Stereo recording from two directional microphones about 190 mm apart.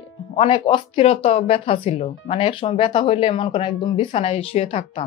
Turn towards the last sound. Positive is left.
turn(degrees=30)  # may be behind; listen again after turning